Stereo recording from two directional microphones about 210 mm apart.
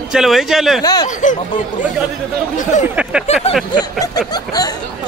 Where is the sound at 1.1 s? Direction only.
35° left (ahead or behind).